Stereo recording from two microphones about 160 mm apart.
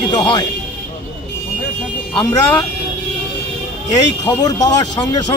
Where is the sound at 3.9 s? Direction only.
25° left (ahead or behind).